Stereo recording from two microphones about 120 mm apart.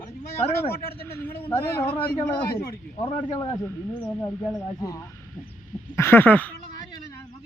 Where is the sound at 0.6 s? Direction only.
20° left (ahead or behind).